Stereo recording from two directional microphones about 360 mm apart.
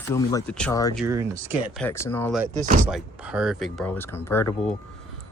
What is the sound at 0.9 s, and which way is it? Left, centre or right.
Speech, centre.